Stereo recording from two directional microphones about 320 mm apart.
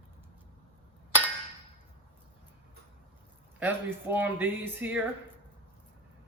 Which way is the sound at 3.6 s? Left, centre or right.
Centre.